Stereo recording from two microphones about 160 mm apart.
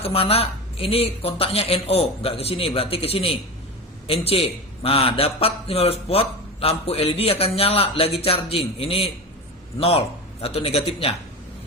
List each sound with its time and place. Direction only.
0.0 s a man's voice: 40° left (ahead or behind)